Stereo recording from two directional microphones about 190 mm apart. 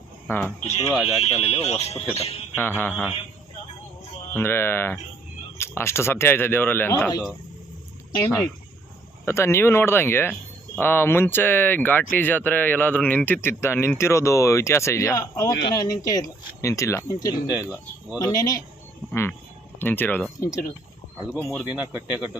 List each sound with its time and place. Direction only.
0.3 s speech: 5° left (ahead or behind)
1.2 s speech: 35° left (ahead or behind)
2.6 s speech: 10° left (ahead or behind)
2.9 s speech: 10° right (ahead or behind)
4.4 s speech: 10° left (ahead or behind)
17.6 s speech: 5° right (ahead or behind)
18.2 s speech: 20° left (ahead or behind)
19.8 s speech: 10° left (ahead or behind)
21.8 s speech: 5° right (ahead or behind)